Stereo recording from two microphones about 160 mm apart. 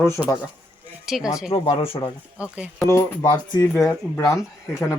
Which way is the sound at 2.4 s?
5° right (ahead or behind).